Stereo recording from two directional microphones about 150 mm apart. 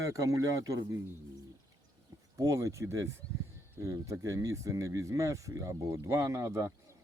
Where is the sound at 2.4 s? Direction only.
20° right (ahead or behind).